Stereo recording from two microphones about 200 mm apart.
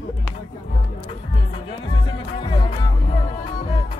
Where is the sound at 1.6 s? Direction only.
25° left (ahead or behind).